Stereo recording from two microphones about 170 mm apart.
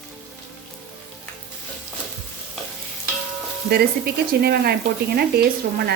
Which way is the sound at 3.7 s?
65° right (ahead or behind).